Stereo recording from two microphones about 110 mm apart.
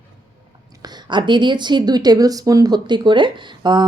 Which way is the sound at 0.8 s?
45° right (ahead or behind).